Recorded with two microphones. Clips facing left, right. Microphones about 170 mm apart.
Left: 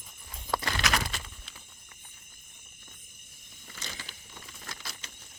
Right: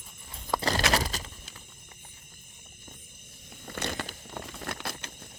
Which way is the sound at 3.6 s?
60° right (ahead or behind).